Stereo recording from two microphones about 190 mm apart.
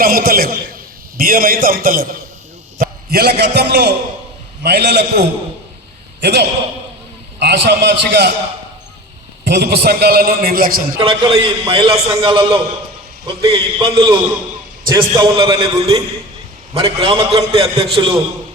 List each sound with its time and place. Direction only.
0.0 s a man's voice: 50° right (ahead or behind)
6.2 s a man's voice: 60° right (ahead or behind)
9.5 s a man's voice: 55° right (ahead or behind)
10.9 s a man's voice: 25° right (ahead or behind)